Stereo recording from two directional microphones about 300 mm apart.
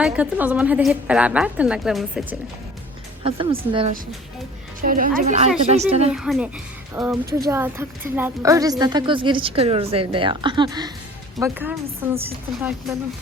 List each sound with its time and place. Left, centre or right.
0.0 s a woman's voice: centre
3.2 s a woman's voice: centre
4.8 s a woman's voice: right
6.1 s a woman's voice: centre